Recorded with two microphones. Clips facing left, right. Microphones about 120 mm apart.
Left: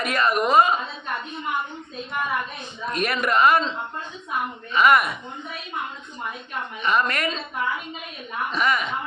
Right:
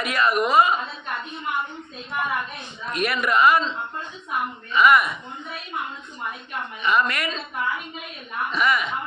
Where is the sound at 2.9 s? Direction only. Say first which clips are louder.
Even; 40° left (ahead or behind).